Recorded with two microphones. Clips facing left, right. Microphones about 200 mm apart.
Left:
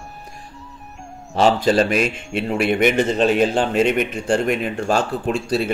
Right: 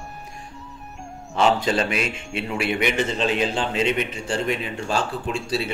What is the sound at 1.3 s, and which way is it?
A man's voice, 35° left (ahead or behind).